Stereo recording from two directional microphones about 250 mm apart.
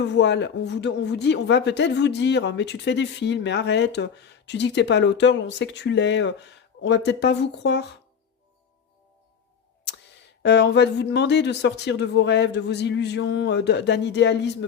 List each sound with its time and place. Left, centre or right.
0.0 s speech: left
10.4 s speech: left